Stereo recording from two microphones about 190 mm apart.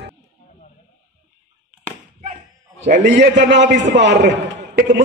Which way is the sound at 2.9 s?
40° right (ahead or behind).